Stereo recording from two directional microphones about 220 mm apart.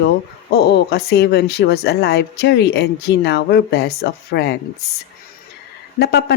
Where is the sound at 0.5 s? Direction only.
50° left (ahead or behind).